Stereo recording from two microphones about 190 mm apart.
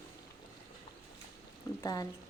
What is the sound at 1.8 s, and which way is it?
Speech, 20° left (ahead or behind).